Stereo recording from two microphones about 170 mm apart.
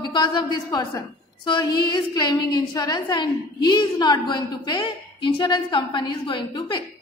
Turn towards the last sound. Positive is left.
turn(degrees=25)  # may be behind; listen again after turning